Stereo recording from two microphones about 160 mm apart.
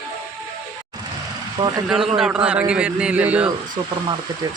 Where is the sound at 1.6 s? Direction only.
25° right (ahead or behind).